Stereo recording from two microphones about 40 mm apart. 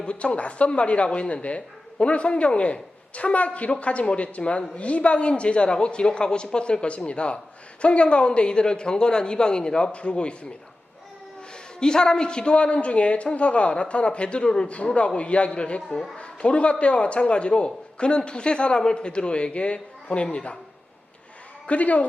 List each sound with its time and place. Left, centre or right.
0.0 s a man's voice: left
11.8 s a man's voice: centre
21.7 s speech: left